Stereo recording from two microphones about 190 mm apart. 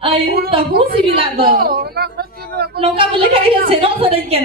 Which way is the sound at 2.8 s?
30° right (ahead or behind).